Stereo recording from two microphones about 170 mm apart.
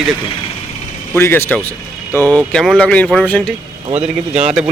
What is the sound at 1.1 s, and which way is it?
A man's voice, 15° left (ahead or behind).